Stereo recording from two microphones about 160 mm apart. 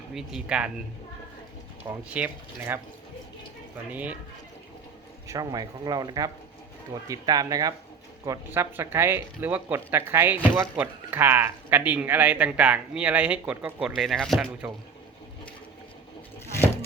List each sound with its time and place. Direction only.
0.1 s speech: 5° right (ahead or behind)
1.9 s speech: 10° right (ahead or behind)
3.9 s speech: 10° right (ahead or behind)
5.3 s speech: 25° right (ahead or behind); by 14.7 s 5° right (ahead or behind)